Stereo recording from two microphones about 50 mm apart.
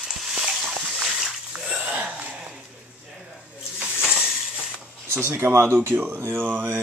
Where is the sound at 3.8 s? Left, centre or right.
Centre.